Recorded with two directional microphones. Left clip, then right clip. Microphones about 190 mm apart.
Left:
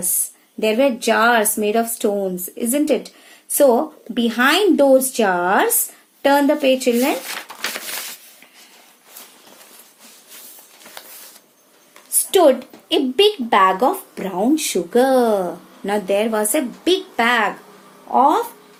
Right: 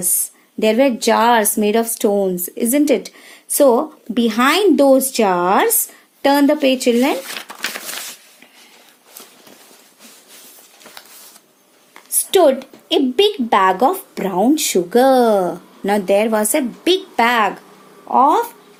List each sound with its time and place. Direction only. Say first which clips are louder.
0.6 s speech: right 2 dB; 45° right (ahead or behind)
12.3 s speech: right 1 dB; 45° right (ahead or behind)